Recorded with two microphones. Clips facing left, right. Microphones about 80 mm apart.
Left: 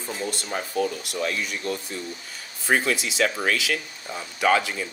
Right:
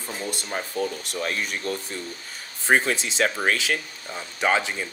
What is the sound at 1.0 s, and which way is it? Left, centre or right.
Speech, right.